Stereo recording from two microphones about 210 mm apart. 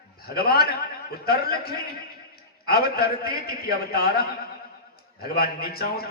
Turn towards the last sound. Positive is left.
turn(degrees=45)  # may be behind; listen again after turning